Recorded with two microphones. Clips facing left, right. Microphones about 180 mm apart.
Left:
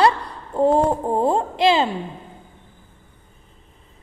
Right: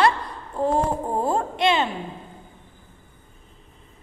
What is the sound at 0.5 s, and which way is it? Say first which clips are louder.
A woman's voice: left 5 dB; 30° left (ahead or behind).